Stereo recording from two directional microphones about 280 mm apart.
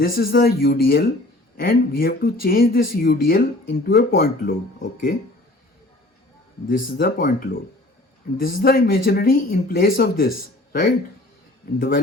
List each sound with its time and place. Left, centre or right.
0.0 s speech: left
6.7 s a man's voice: left